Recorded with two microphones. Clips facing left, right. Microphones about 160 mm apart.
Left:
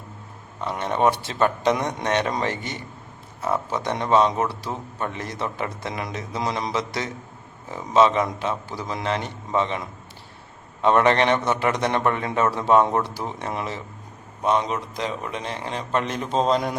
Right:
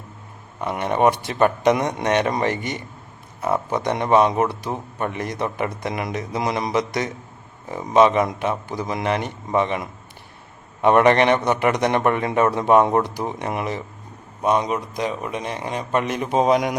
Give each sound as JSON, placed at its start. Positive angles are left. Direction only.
{"t": 0.6, "sound": "a man's voice", "side_deg": -15}
{"t": 10.8, "sound": "a man's voice", "side_deg": -15}